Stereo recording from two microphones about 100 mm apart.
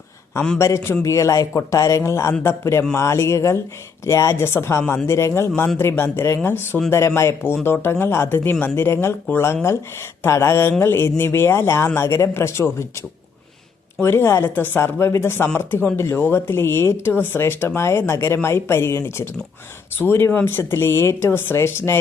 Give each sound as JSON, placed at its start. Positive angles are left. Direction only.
{"t": 0.6, "sound": "speech", "side_deg": 30}
{"t": 14.0, "sound": "speech", "side_deg": 25}